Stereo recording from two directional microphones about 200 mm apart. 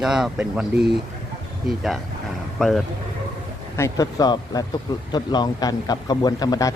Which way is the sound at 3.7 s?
15° left (ahead or behind).